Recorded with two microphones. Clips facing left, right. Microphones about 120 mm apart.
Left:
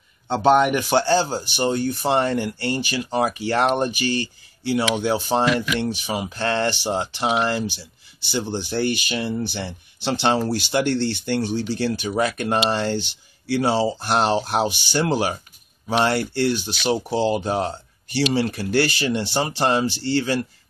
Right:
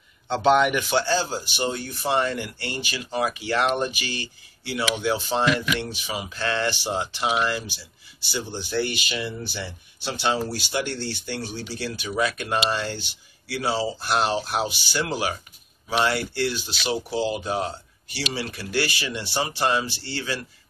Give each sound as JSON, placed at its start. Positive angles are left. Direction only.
{"t": 0.3, "sound": "speech", "side_deg": 40}
{"t": 8.7, "sound": "speech", "side_deg": 45}
{"t": 10.0, "sound": "speech", "side_deg": 60}
{"t": 12.7, "sound": "speech", "side_deg": 60}